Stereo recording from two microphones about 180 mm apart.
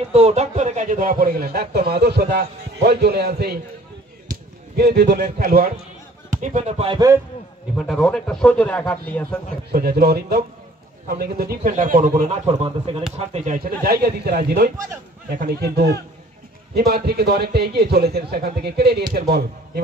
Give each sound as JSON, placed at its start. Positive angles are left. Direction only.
{"t": 0.1, "sound": "a man's voice", "side_deg": -35}
{"t": 4.7, "sound": "a man's voice", "side_deg": -60}
{"t": 6.4, "sound": "speech", "side_deg": -40}
{"t": 7.7, "sound": "a man's voice", "side_deg": 5}
{"t": 9.7, "sound": "a man's voice", "side_deg": -60}
{"t": 12.3, "sound": "speech", "side_deg": -30}
{"t": 13.3, "sound": "speech", "side_deg": -45}
{"t": 13.8, "sound": "a man's voice", "side_deg": -60}